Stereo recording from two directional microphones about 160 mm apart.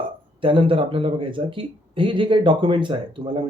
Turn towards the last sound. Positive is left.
turn(degrees=-30)  # may be behind; listen again after turning